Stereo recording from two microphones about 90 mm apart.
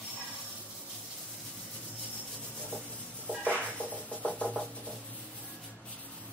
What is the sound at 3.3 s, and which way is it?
Music, 20° right (ahead or behind).